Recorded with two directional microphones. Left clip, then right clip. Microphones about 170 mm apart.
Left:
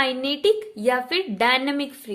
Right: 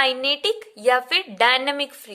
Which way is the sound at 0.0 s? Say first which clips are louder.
Right 1 dB; 30° right (ahead or behind).